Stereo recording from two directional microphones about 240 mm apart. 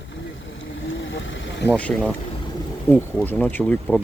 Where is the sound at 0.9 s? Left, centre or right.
Left.